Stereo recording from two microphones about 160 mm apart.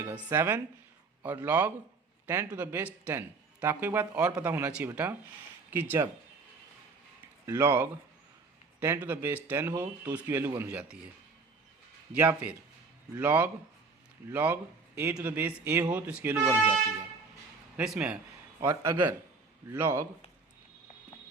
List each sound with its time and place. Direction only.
0.3 s a man's voice: 15° right (ahead or behind)
7.4 s a man's voice: 15° right (ahead or behind)
12.2 s a man's voice: 10° right (ahead or behind)
17.7 s a man's voice: 5° right (ahead or behind)
18.6 s a man's voice: 15° right (ahead or behind)